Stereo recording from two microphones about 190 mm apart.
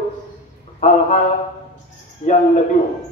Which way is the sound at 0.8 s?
45° left (ahead or behind).